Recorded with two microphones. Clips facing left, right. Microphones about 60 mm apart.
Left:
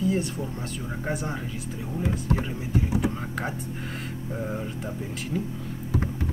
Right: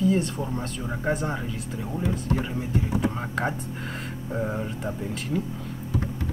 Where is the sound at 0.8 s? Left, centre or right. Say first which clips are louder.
Right 2 dB; centre.